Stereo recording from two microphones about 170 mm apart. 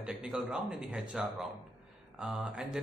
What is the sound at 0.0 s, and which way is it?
A man's voice, 5° right (ahead or behind).